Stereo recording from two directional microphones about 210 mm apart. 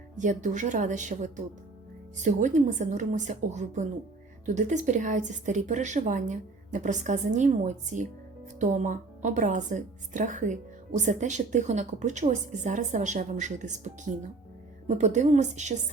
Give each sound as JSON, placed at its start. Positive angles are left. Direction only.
{"t": 0.2, "sound": "speech", "side_deg": -35}